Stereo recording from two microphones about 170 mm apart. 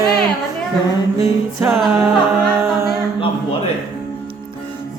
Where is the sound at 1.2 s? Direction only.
15° right (ahead or behind).